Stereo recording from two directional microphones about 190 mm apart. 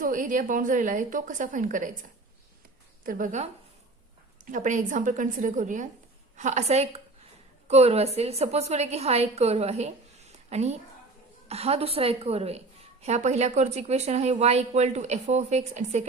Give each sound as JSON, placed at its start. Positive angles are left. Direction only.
{"t": 0.0, "sound": "a woman's voice", "side_deg": -45}
{"t": 3.0, "sound": "a woman's voice", "side_deg": -45}
{"t": 4.5, "sound": "a woman's voice", "side_deg": -40}